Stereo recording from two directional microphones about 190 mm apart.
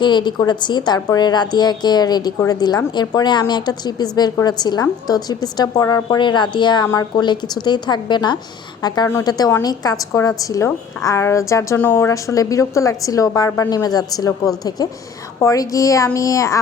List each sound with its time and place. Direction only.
0.0 s a woman's voice: 25° left (ahead or behind)